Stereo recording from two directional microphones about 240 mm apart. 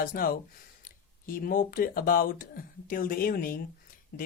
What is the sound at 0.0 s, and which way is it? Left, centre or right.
Speech, left.